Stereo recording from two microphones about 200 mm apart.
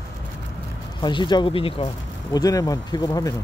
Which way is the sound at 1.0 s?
20° left (ahead or behind).